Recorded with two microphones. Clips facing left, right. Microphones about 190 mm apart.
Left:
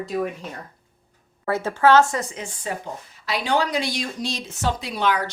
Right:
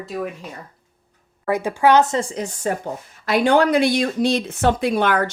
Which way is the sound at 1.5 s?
15° right (ahead or behind).